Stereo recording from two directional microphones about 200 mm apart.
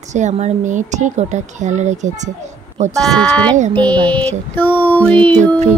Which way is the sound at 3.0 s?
5° left (ahead or behind).